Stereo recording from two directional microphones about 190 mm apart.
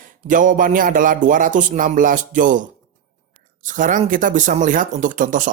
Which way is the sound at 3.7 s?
40° right (ahead or behind).